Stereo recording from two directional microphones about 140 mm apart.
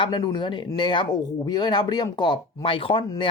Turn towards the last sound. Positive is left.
turn(degrees=40)  # may be behind; listen again after turning